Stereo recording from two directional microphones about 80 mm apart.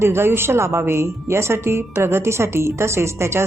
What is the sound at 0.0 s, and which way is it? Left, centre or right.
Speech, right.